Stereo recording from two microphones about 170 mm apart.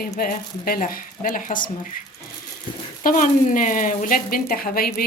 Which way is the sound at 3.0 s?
50° left (ahead or behind).